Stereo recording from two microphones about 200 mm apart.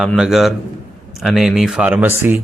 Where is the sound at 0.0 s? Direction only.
Centre (ahead or behind).